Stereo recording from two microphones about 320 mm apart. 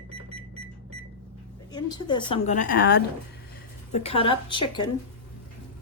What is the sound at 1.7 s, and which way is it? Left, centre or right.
A woman's voice, centre.